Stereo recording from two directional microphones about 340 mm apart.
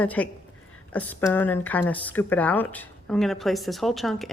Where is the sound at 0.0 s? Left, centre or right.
Centre.